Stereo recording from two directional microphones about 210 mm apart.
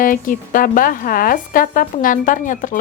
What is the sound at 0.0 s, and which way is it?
Speech, 40° left (ahead or behind).